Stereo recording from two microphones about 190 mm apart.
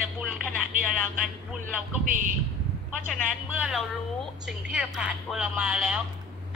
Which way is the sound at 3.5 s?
5° right (ahead or behind).